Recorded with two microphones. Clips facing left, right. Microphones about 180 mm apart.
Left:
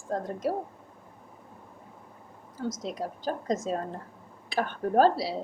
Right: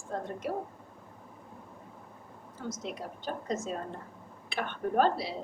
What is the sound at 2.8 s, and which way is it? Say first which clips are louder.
A woman's voice: left 5 dB; 40° left (ahead or behind).